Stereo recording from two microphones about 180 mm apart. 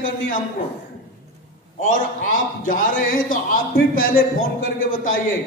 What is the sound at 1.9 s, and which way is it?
A man's voice, 50° left (ahead or behind).